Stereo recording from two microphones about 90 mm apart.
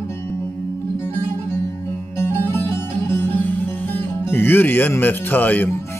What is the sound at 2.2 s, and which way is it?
Music, 20° left (ahead or behind).